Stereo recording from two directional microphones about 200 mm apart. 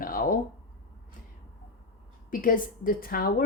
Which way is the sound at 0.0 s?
45° left (ahead or behind).